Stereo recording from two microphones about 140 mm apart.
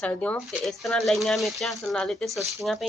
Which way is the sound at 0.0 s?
10° left (ahead or behind).